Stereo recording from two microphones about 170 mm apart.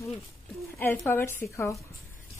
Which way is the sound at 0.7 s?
10° left (ahead or behind).